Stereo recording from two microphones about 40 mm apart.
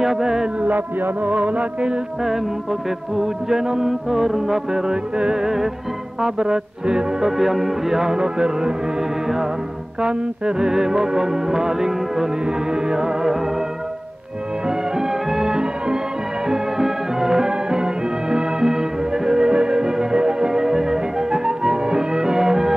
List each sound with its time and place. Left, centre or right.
0.0 s music: centre
0.6 s music: right
3.2 s music: centre
7.3 s music: centre
10.0 s music: centre
14.7 s music: centre